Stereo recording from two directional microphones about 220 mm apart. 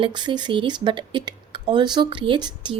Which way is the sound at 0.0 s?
20° right (ahead or behind).